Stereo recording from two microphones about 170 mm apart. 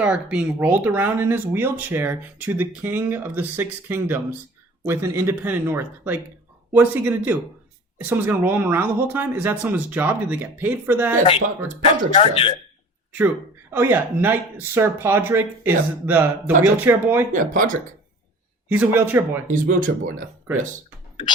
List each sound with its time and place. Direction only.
0.0 s speech: 5° right (ahead or behind)
12.1 s speech: 35° left (ahead or behind)
13.1 s speech: 10° right (ahead or behind)
17.3 s speech: 50° right (ahead or behind)
18.7 s speech: 10° right (ahead or behind)
19.5 s speech: 50° right (ahead or behind)